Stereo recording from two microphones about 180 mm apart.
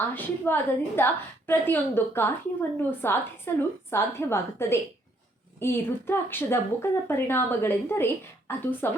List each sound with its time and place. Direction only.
0.1 s a woman's voice: 10° left (ahead or behind)